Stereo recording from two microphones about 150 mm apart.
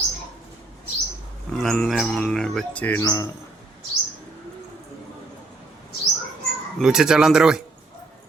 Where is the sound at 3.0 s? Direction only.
20° left (ahead or behind).